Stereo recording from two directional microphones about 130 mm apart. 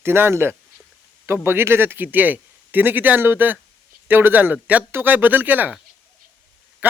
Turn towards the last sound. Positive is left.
turn(degrees=-10)  # may be behind; listen again after turning